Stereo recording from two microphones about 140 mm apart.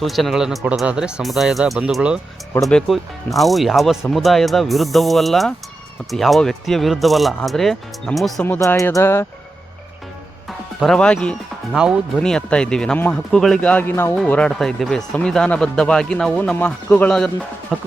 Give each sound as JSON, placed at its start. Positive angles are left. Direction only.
{"t": 0.0, "sound": "speech", "side_deg": 0}
{"t": 8.4, "sound": "speech", "side_deg": 20}
{"t": 10.8, "sound": "speech", "side_deg": 5}